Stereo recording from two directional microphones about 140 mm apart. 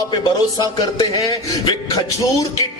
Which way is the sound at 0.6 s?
30° left (ahead or behind).